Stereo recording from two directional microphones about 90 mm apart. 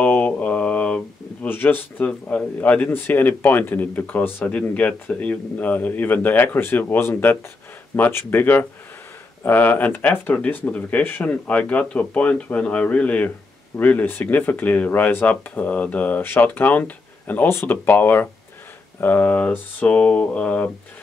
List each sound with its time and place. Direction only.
0.0 s speech: 15° left (ahead or behind)